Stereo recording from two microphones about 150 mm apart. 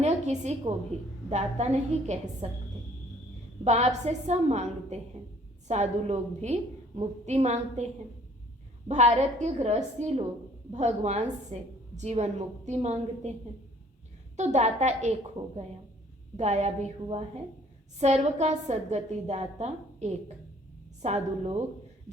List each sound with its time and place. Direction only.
0.0 s a sound: 50° right (ahead or behind)
0.9 s a woman's voice: 50° right (ahead or behind)
3.6 s a woman's voice: 45° right (ahead or behind)
8.9 s a woman's voice: 50° right (ahead or behind)
14.3 s a woman's voice: 50° right (ahead or behind)
16.4 s a woman's voice: 50° right (ahead or behind)